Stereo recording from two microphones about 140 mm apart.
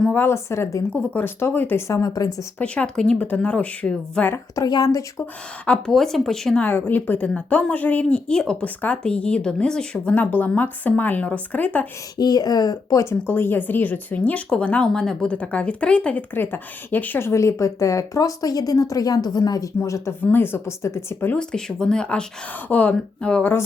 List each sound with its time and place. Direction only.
0.0 s speech: 15° left (ahead or behind)
2.6 s speech: 10° left (ahead or behind)
4.5 s speech: 25° left (ahead or behind)
5.6 s speech: 5° left (ahead or behind)
12.1 s speech: 30° left (ahead or behind)
21.3 s speech: 5° left (ahead or behind)